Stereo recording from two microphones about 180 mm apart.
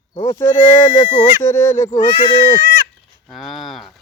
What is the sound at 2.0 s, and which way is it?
Speech, 45° left (ahead or behind).